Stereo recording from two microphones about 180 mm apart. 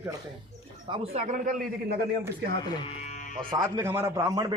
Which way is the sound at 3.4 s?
25° right (ahead or behind).